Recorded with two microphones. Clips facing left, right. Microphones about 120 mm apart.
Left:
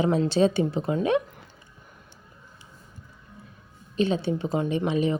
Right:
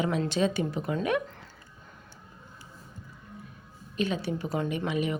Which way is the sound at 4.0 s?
30° left (ahead or behind).